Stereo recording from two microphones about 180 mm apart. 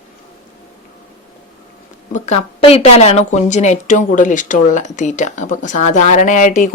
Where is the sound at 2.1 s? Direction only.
40° left (ahead or behind).